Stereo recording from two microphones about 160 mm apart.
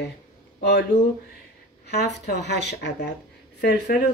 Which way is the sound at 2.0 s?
90° left.